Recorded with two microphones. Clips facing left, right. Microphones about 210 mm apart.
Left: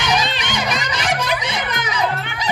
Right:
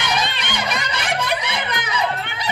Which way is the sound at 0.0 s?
55° right (ahead or behind).